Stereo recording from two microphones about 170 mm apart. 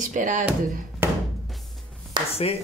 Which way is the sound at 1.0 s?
10° right (ahead or behind).